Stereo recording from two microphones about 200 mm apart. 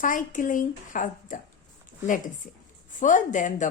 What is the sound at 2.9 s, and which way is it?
Speech, 40° left (ahead or behind).